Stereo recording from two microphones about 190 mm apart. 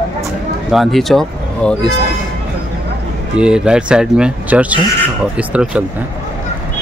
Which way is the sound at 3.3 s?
5° right (ahead or behind).